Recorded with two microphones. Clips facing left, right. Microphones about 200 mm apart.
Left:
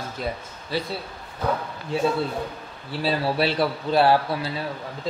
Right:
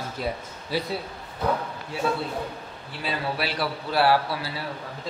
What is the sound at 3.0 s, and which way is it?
Speech, 30° left (ahead or behind).